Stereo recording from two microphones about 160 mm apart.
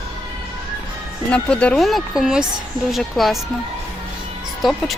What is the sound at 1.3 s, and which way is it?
Speech, 5° left (ahead or behind).